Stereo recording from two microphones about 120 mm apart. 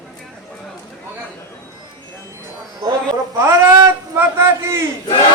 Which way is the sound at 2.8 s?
25° right (ahead or behind).